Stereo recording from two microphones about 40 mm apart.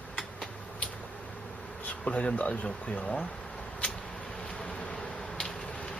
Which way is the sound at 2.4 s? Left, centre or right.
Left.